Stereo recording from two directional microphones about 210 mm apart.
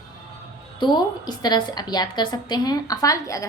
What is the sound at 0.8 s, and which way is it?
A woman's voice, 20° left (ahead or behind).